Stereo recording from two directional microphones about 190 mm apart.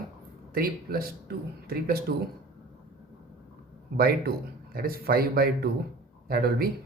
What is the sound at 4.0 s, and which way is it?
Speech, 55° right (ahead or behind).